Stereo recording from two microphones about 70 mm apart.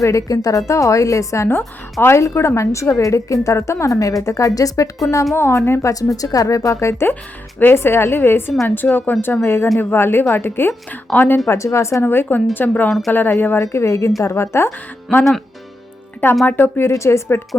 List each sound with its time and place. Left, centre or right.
0.0 s a woman's voice: left
1.5 s a woman's voice: left
5.3 s a woman's voice: left
5.9 s a woman's voice: left
7.6 s a woman's voice: left
11.4 s a woman's voice: left
12.0 s a woman's voice: left
13.6 s a woman's voice: left
16.5 s a woman's voice: left
16.9 s a woman's voice: left